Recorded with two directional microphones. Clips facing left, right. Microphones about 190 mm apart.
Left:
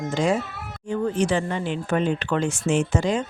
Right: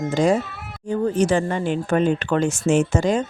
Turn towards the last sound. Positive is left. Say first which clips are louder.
# right 3 dB
turn(degrees=-45)  # may be behind; listen again after turning